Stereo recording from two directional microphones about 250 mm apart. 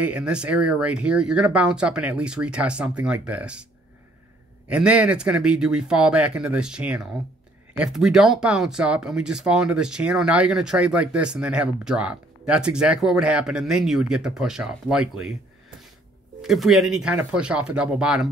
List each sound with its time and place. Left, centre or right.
0.0 s speech: centre
4.6 s speech: centre
16.3 s speech: centre